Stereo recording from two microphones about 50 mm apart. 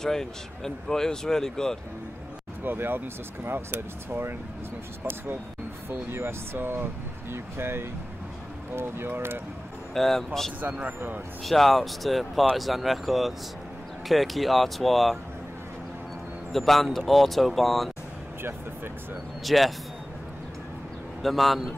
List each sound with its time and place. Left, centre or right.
0.0 s speech: centre
2.6 s speech: right
5.9 s speech: right
9.9 s speech: centre
10.6 s speech: right
11.4 s speech: centre
16.5 s speech: centre
19.4 s speech: centre
21.2 s speech: centre